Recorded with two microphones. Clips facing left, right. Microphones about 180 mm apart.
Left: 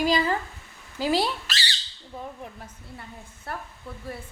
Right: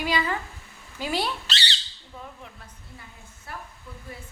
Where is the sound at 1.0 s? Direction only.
25° left (ahead or behind).